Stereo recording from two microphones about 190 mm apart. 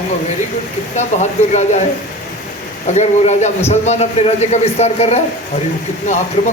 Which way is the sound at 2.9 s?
35° left (ahead or behind).